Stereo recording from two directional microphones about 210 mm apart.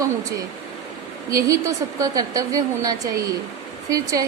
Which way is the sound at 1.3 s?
15° right (ahead or behind).